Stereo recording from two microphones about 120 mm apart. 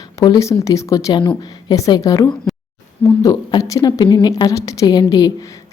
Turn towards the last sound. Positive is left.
turn(degrees=35)  # may be behind; listen again after turning